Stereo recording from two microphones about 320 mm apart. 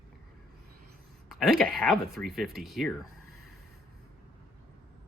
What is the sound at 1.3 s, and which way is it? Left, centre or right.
Speech, centre.